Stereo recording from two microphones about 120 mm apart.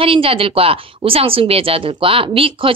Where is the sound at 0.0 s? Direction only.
50° right (ahead or behind).